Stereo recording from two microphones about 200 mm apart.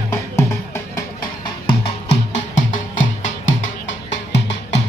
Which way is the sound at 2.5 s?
40° left (ahead or behind).